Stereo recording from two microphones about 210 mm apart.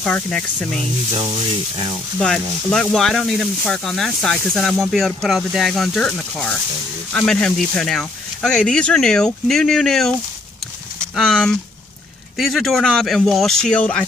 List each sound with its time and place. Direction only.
0.0 s speech: 5° left (ahead or behind)
2.1 s speech: 5° left (ahead or behind)
11.1 s speech: centre (ahead or behind)